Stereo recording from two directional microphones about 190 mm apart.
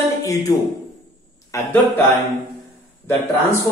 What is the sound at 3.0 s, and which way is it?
Speech, 10° left (ahead or behind).